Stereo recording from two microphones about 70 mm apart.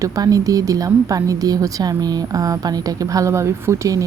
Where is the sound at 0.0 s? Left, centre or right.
Right.